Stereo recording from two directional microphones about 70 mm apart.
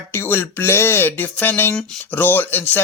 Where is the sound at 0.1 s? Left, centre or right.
Left.